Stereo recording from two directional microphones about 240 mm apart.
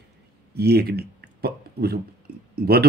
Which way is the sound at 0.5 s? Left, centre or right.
Right.